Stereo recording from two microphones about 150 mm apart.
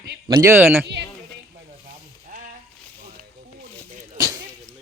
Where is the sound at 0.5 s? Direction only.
15° right (ahead or behind).